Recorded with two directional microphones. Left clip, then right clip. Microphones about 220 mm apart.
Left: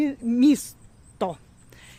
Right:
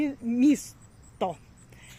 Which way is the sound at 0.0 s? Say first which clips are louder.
Left 4 dB; 25° left (ahead or behind).